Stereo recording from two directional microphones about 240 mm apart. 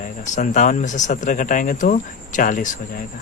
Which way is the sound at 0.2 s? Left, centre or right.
Left.